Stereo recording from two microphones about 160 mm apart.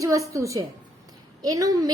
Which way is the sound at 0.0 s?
20° right (ahead or behind).